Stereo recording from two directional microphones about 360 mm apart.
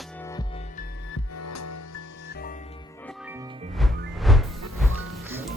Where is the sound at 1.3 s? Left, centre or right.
Left.